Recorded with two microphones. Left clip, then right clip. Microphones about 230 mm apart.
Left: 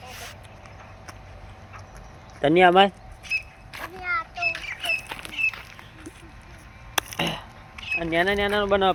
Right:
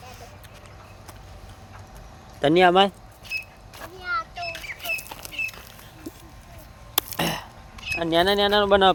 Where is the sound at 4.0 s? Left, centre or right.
Right.